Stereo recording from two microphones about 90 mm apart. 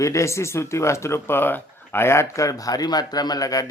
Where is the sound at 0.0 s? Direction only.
35° left (ahead or behind).